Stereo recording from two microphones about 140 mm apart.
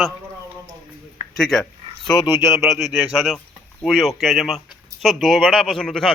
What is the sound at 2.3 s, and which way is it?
Speech, 20° right (ahead or behind).